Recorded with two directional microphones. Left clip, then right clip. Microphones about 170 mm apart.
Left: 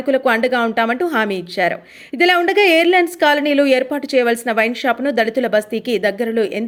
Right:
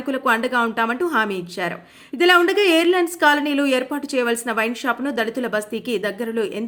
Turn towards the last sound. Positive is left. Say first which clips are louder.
# left 6 dB
turn(degrees=25)  # may be behind; listen again after turning